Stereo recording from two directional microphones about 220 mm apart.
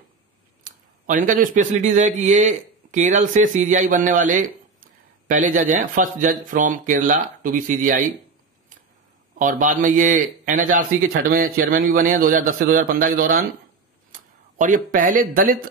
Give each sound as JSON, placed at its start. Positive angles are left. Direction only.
{"t": 0.7, "sound": "a man's voice", "side_deg": -35}
{"t": 9.4, "sound": "a man's voice", "side_deg": -35}